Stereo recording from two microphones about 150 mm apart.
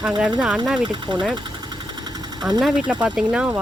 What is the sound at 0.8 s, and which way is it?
Speech, 30° right (ahead or behind).